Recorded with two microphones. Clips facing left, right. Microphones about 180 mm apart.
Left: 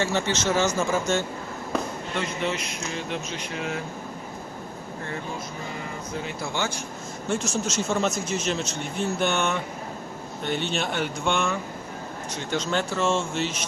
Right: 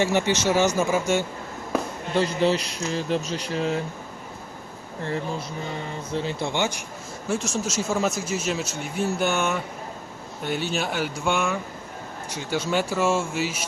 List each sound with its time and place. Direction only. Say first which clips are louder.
0.0 s speech: right 3 dB; 15° right (ahead or behind)
2.1 s speech: right 7 dB; 35° right (ahead or behind)
6.1 s speech: right 5 dB; 30° right (ahead or behind)
7.3 s speech: even; centre (ahead or behind)